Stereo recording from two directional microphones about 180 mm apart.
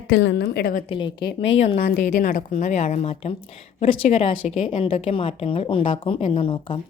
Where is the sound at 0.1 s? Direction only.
85° left; by 0.7 s 65° left (ahead or behind).